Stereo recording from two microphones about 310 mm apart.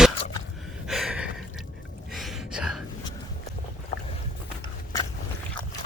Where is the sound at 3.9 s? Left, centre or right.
Left.